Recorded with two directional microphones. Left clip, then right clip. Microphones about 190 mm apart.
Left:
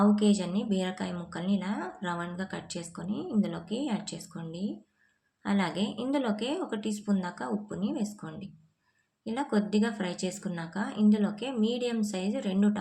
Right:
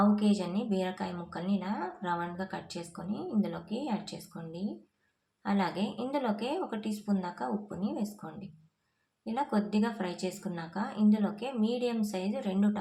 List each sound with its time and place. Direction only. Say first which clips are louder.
0.2 s speech: left 3 dB; 20° left (ahead or behind)